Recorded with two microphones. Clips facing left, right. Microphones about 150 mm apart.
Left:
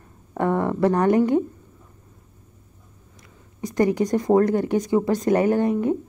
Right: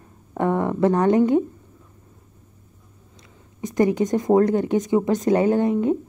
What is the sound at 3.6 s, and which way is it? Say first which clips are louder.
A woman's voice: right 1 dB; 20° right (ahead or behind).